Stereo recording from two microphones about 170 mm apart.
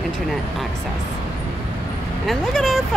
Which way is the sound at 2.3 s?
Centre (ahead or behind).